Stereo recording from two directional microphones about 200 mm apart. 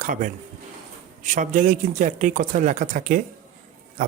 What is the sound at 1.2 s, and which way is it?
Speech, 40° right (ahead or behind).